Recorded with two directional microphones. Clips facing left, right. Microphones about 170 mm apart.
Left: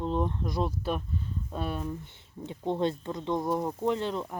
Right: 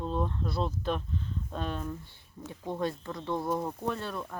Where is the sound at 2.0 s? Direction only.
20° left (ahead or behind).